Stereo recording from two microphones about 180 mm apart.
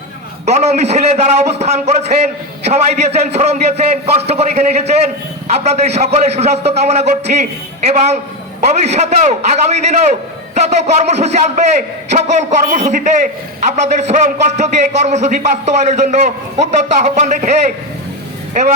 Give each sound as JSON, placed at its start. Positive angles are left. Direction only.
{"t": 0.4, "sound": "a man's voice", "side_deg": -40}